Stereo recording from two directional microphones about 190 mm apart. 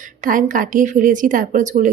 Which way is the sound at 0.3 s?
45° right (ahead or behind).